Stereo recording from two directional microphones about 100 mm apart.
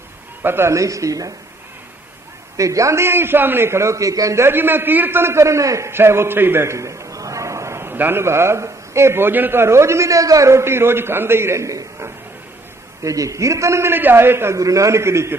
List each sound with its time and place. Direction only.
0.4 s speech: 25° right (ahead or behind)
2.5 s a man's voice: 35° right (ahead or behind)